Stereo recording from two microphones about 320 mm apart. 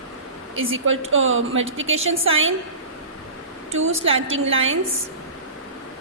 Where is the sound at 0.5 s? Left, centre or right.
Right.